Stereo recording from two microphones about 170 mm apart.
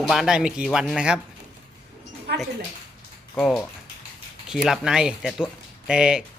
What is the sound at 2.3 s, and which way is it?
Speech, 75° right (ahead or behind).